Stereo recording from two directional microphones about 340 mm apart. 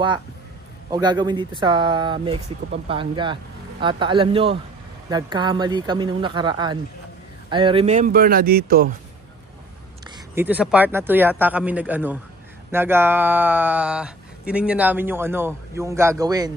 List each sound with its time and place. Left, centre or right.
0.8 s speech: centre
10.1 s speech: centre